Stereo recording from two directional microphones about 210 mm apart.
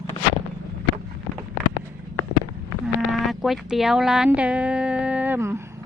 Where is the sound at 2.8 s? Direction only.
Centre (ahead or behind).